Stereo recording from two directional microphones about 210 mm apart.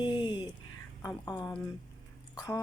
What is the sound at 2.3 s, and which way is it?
Speech, 15° left (ahead or behind).